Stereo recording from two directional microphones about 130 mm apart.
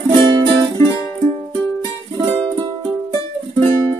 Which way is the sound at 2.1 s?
40° right (ahead or behind).